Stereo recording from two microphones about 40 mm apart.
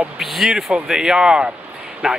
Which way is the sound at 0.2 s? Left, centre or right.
Centre.